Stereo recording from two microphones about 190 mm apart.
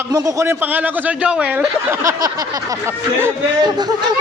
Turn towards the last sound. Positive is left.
turn(degrees=-20)  # may be behind; listen again after turning